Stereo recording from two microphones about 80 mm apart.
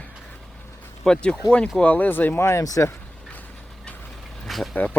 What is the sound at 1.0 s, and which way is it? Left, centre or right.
Speech, centre.